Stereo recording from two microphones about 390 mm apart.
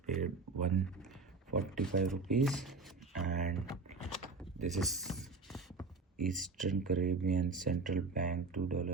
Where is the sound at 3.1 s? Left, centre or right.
Centre.